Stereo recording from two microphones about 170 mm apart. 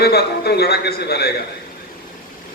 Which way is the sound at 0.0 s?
70° left (ahead or behind).